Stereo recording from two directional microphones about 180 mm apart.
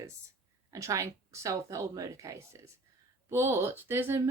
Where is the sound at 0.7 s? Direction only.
20° right (ahead or behind).